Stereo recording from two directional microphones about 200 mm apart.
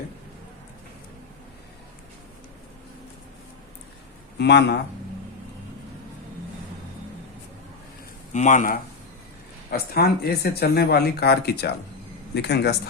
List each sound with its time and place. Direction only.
4.4 s speech: 55° left (ahead or behind)
8.3 s speech: 40° left (ahead or behind); by 12.7 s 55° left (ahead or behind)